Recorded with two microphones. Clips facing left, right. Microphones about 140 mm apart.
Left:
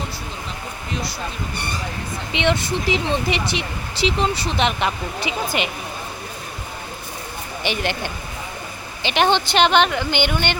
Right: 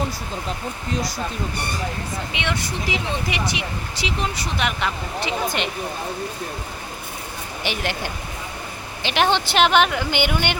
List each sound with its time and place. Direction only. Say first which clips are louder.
2.3 s speech: left 9 dB; 25° left (ahead or behind)
5.2 s speech: even; 5° left (ahead or behind)
7.6 s speech: left 2 dB; centre (ahead or behind)